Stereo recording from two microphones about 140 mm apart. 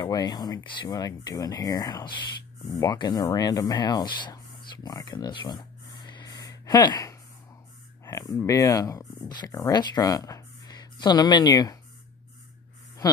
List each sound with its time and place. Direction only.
0.0 s speech: 30° left (ahead or behind)
4.8 s a sound: 25° left (ahead or behind)
8.0 s speech: 25° left (ahead or behind)
13.0 s speech: 25° left (ahead or behind)